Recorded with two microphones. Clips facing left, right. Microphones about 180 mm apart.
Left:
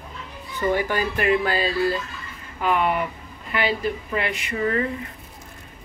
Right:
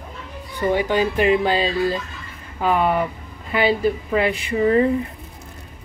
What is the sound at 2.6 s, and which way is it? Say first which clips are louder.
Speech: right 3 dB; 30° right (ahead or behind).